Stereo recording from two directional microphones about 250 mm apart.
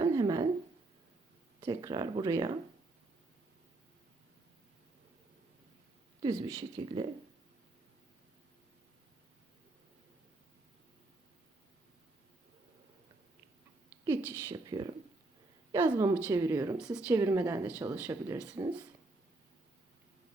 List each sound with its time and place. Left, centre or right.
0.0 s a sound: centre
1.6 s a woman's voice: centre
6.1 s a woman's voice: centre
14.0 s a woman's voice: centre